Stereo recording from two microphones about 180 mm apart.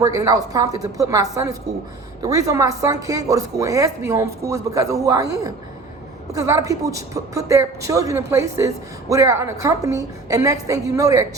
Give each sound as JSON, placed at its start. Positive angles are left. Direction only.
{"t": 0.0, "sound": "a woman's voice", "side_deg": -20}